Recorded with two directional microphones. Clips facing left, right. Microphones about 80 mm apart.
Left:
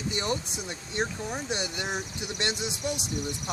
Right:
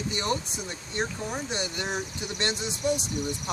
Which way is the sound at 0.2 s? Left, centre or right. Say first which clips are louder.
Right 2 dB; centre.